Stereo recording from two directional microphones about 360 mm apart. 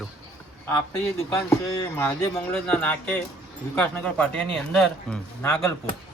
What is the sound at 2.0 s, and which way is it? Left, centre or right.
A man's voice, centre.